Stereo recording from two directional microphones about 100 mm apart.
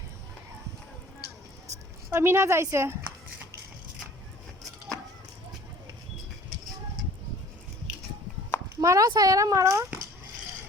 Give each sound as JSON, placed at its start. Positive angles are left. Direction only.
{"t": 2.0, "sound": "a woman's voice", "side_deg": -25}
{"t": 8.7, "sound": "speech", "side_deg": -30}